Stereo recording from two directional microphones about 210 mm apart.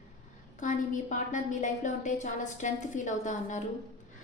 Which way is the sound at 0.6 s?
35° left (ahead or behind).